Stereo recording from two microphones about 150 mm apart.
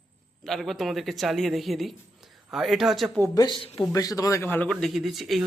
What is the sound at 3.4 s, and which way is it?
Speech, 35° left (ahead or behind).